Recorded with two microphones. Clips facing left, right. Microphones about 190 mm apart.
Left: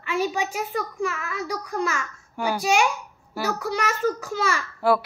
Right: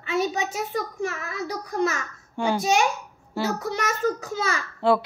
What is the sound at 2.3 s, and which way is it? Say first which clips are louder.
A child's voice: even; 25° right (ahead or behind).